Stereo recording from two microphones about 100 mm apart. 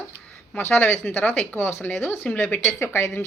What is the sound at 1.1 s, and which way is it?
A woman's voice, 20° left (ahead or behind).